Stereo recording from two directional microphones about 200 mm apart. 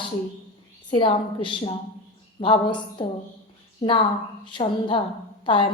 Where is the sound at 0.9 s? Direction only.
25° left (ahead or behind).